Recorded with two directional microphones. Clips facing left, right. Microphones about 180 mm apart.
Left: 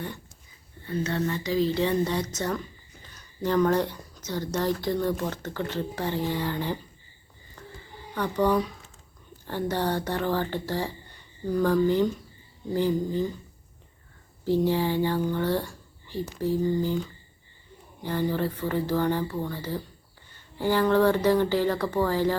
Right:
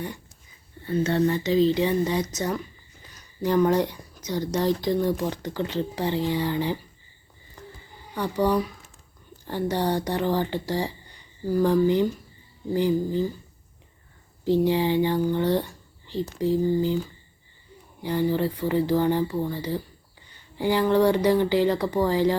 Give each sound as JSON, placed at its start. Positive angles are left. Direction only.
{"t": 1.0, "sound": "speech", "side_deg": -30}
{"t": 8.1, "sound": "speech", "side_deg": -10}
{"t": 14.4, "sound": "speech", "side_deg": -15}
{"t": 18.0, "sound": "speech", "side_deg": -15}